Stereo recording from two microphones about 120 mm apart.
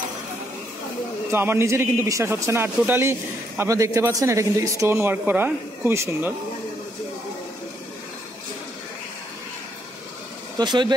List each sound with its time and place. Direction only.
1.3 s a man's voice: 20° right (ahead or behind)
10.6 s speech: 40° right (ahead or behind)